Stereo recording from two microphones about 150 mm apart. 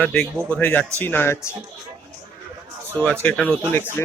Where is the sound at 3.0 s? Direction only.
10° left (ahead or behind).